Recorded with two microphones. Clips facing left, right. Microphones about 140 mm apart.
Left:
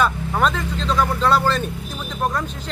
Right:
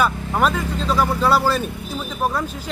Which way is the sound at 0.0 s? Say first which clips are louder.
Even; 5° right (ahead or behind).